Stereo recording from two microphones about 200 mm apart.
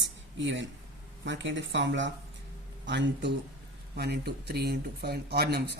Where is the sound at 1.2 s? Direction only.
65° right (ahead or behind).